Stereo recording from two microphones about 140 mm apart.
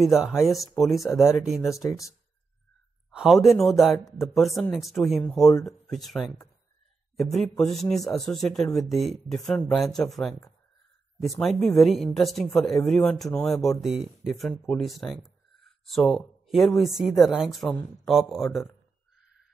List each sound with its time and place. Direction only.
0.0 s speech: 5° right (ahead or behind)
1.8 s speech: 25° left (ahead or behind)
3.1 s a sound: 5° right (ahead or behind)
3.4 s speech: centre (ahead or behind)